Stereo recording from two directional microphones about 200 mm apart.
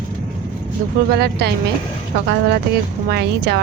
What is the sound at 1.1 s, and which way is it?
Speech, 55° right (ahead or behind).